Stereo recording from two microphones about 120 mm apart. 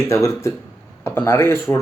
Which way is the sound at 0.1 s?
25° left (ahead or behind).